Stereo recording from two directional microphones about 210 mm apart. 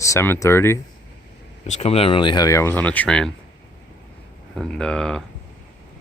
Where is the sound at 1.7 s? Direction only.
30° left (ahead or behind); by 3.3 s 5° left (ahead or behind).